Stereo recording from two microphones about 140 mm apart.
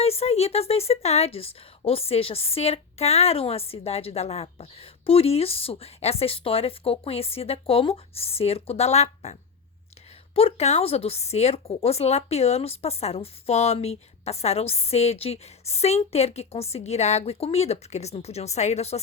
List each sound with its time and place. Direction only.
0.0 s speech: 45° left (ahead or behind)